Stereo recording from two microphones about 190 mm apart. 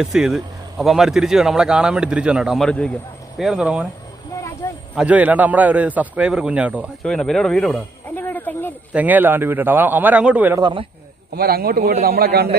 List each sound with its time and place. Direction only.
0.0 s a man's voice: centre (ahead or behind)
4.9 s a man's voice: 5° right (ahead or behind); by 8.7 s 10° left (ahead or behind)
8.9 s a man's voice: 10° right (ahead or behind)
10.6 s speech: 25° right (ahead or behind)
11.3 s a man's voice: 55° right (ahead or behind)